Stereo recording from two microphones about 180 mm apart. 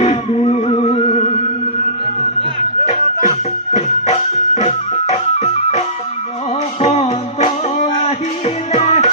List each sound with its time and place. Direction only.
0.0 s music: 35° left (ahead or behind)
3.7 s music: 35° left (ahead or behind)
6.8 s music: 35° left (ahead or behind)